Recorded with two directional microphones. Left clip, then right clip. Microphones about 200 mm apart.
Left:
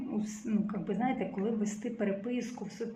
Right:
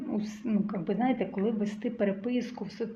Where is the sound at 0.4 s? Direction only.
40° right (ahead or behind).